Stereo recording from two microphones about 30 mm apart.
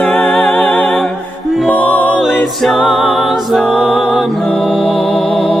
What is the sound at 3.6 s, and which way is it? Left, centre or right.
Music, right.